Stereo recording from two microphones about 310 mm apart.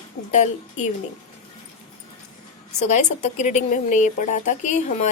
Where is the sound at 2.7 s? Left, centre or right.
Left.